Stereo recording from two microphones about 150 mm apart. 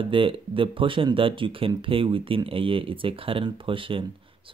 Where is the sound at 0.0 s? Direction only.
35° right (ahead or behind).